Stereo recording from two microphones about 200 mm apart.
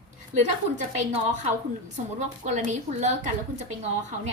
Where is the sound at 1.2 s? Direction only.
35° right (ahead or behind).